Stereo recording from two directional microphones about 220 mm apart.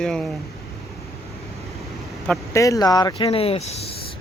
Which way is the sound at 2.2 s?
15° left (ahead or behind).